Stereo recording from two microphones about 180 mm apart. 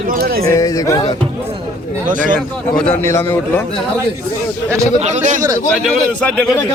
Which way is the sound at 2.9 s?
15° left (ahead or behind).